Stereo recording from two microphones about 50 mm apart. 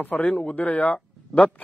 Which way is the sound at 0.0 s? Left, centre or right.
Left.